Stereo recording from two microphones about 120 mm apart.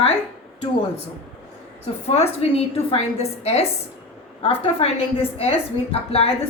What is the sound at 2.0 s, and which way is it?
A woman's voice, 60° left (ahead or behind).